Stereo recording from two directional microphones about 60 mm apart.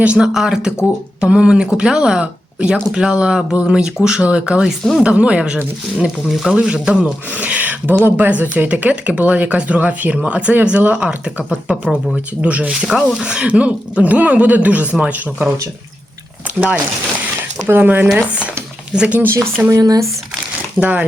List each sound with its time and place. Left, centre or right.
0.0 s speech: right
0.3 s speech: centre
6.2 s speech: centre
6.6 s speech: centre
16.6 s speech: right
19.2 s speech: right
19.7 s speech: right
20.7 s speech: right